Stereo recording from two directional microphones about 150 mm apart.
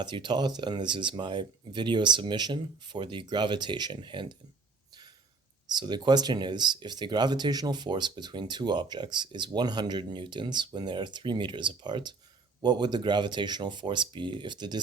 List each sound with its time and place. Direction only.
0.0 s speech: 30° right (ahead or behind)
5.6 s speech: 30° right (ahead or behind)